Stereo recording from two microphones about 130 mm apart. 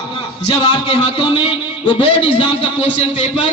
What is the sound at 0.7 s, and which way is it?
A man's voice, 35° left (ahead or behind).